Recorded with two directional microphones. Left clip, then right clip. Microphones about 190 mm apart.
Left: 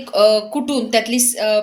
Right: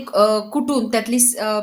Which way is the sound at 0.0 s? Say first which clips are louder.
Left 3 dB; 50° right (ahead or behind).